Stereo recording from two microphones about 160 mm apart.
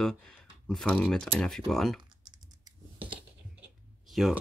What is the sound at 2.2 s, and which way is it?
Typing, 30° right (ahead or behind).